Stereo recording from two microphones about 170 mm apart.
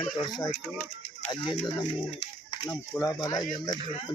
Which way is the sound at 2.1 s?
35° left (ahead or behind).